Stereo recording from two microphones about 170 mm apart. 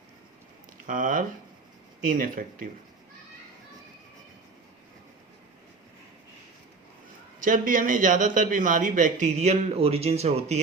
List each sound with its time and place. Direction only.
0.9 s a man's voice: 50° right (ahead or behind)
7.3 s a man's voice: 50° right (ahead or behind)